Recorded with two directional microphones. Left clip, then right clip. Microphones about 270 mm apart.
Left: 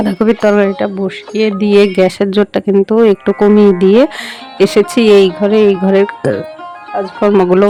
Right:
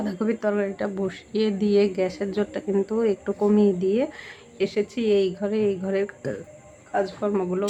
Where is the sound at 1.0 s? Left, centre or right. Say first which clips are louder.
Left 11 dB; left.